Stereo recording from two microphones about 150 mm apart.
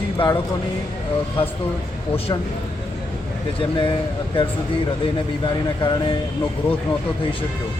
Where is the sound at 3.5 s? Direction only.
35° left (ahead or behind).